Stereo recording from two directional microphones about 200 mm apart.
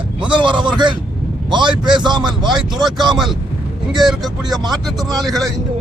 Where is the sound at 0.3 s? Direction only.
25° right (ahead or behind).